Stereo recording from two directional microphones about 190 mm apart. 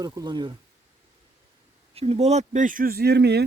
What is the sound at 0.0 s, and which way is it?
Speech, 20° right (ahead or behind).